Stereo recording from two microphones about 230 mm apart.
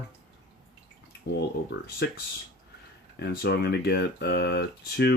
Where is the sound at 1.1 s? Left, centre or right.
Left.